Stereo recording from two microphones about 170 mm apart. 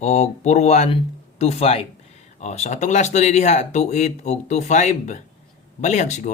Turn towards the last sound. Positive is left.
turn(degrees=45)  # may be behind; listen again after turning